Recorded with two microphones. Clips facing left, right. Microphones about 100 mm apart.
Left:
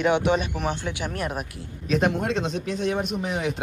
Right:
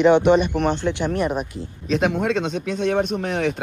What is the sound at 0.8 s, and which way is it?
Speech, 5° left (ahead or behind).